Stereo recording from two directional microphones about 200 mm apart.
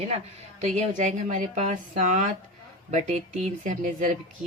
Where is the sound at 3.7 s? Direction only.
40° right (ahead or behind).